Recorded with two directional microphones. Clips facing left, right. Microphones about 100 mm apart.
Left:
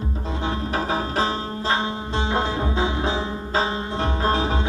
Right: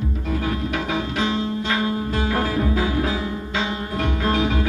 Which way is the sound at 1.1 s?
35° left (ahead or behind).